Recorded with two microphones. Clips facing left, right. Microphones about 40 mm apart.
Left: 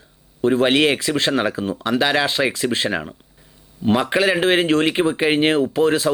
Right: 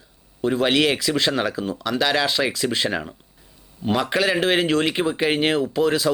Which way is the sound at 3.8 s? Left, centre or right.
Centre.